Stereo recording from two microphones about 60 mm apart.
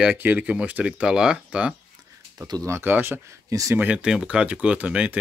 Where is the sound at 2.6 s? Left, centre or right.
Right.